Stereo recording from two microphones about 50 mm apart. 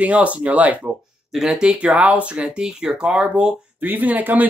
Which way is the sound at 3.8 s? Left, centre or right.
Right.